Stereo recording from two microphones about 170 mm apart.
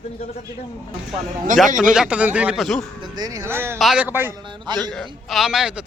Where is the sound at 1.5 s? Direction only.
50° right (ahead or behind).